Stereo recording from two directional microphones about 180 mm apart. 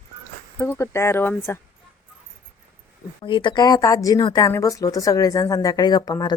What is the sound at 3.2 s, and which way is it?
Speech, 25° left (ahead or behind).